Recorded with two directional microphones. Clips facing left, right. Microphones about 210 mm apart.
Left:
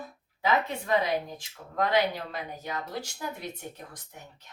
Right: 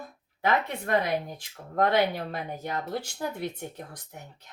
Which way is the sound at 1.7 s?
55° right (ahead or behind).